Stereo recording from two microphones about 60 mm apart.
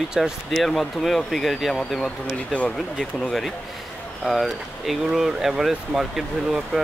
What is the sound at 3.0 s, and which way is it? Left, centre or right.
Speech, centre.